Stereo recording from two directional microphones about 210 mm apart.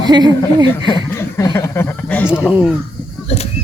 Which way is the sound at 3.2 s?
30° left (ahead or behind).